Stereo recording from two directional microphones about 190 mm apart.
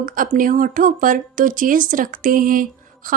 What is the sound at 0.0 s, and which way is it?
Speech, 45° right (ahead or behind).